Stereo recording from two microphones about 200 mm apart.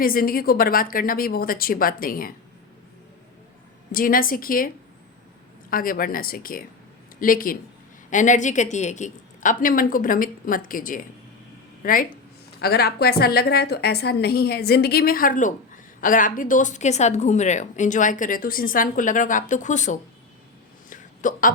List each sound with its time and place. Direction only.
0.0 s a woman's voice: 45° left (ahead or behind)
3.9 s a woman's voice: 45° left (ahead or behind)
5.7 s a woman's voice: 45° left (ahead or behind)
20.9 s hiccup: 40° left (ahead or behind)